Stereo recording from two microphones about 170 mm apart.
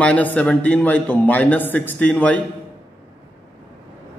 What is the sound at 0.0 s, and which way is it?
A man's voice, 10° left (ahead or behind).